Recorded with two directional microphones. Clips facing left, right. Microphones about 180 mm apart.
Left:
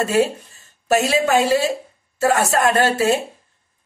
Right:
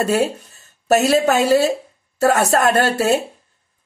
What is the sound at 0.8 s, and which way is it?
A woman's voice, 40° right (ahead or behind).